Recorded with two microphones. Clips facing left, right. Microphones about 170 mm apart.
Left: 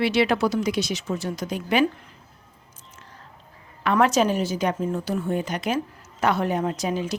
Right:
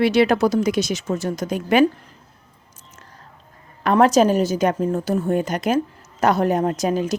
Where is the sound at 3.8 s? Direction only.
40° right (ahead or behind).